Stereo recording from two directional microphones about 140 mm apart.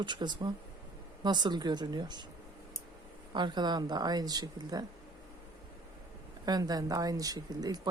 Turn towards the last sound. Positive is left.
turn(degrees=-25)  # may be behind; listen again after turning